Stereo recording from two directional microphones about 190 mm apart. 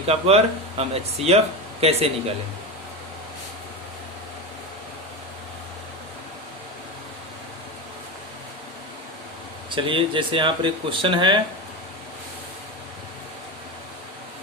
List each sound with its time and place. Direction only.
0.0 s speech: 30° right (ahead or behind)
9.6 s speech: 25° right (ahead or behind)